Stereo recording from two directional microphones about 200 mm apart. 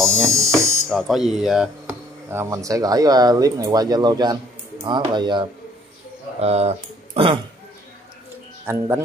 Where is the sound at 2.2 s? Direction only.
15° right (ahead or behind); by 7.3 s 30° right (ahead or behind).